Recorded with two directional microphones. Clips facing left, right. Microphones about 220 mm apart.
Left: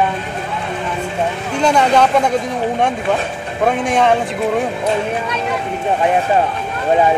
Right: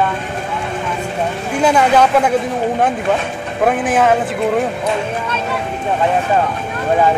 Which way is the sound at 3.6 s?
5° right (ahead or behind).